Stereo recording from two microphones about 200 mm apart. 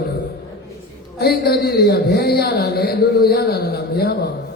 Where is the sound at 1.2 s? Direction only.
50° left (ahead or behind).